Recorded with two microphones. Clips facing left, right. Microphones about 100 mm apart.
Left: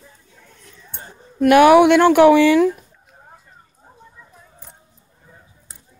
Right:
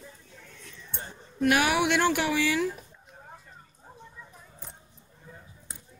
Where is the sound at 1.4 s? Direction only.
60° left (ahead or behind).